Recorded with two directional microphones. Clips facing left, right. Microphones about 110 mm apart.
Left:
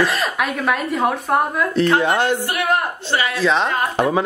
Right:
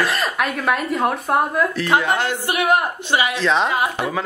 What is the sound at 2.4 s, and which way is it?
Speech, 15° right (ahead or behind).